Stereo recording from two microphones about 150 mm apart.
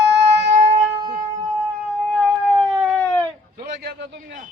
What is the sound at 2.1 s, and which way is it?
Cat, centre (ahead or behind).